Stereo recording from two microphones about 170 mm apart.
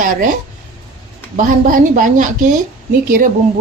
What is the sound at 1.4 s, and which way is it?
Speech, 50° right (ahead or behind).